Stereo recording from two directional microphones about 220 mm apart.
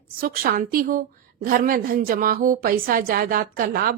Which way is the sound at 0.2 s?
40° right (ahead or behind).